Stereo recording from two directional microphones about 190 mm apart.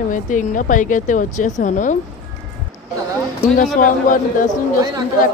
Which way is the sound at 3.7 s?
45° left (ahead or behind).